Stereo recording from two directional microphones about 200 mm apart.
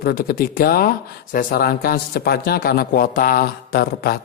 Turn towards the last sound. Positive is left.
turn(degrees=50)  # may be behind; listen again after turning